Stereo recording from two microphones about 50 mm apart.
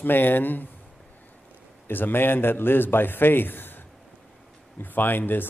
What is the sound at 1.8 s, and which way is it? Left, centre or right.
A man's voice, left.